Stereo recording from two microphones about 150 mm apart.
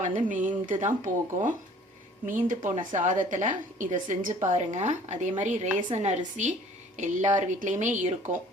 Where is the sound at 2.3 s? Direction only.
60° right (ahead or behind).